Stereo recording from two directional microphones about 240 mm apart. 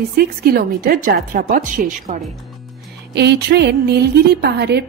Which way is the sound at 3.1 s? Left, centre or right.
Right.